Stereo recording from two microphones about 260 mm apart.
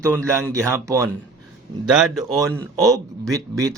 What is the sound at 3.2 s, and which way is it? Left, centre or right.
Speech, centre.